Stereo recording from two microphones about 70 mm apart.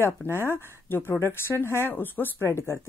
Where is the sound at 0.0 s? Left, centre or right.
Left.